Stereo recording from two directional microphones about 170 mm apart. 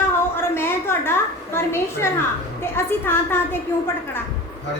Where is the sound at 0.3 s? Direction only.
15° left (ahead or behind).